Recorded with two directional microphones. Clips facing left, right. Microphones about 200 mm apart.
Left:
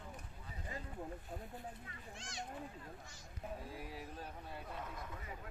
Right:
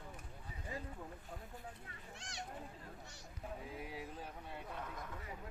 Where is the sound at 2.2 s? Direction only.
65° right (ahead or behind).